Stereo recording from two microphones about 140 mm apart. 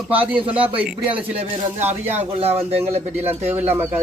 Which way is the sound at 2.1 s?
45° right (ahead or behind).